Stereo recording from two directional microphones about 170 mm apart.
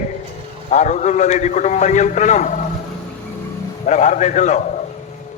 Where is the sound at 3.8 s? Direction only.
45° left (ahead or behind).